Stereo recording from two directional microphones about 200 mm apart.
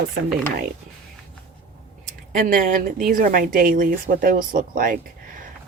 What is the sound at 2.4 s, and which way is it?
Speech, 45° right (ahead or behind).